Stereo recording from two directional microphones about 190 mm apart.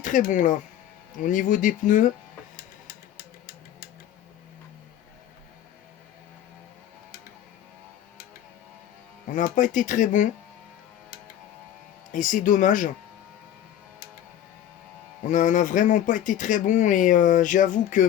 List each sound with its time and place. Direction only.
0.0 s speech: 40° left (ahead or behind)
2.6 s a sound: 50° left (ahead or behind)
9.3 s speech: 40° left (ahead or behind)
12.1 s speech: 45° left (ahead or behind)
15.3 s speech: 40° left (ahead or behind)